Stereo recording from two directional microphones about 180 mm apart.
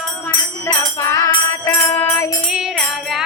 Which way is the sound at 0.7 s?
15° left (ahead or behind).